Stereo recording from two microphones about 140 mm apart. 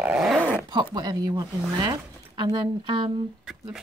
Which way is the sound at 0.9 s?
30° right (ahead or behind).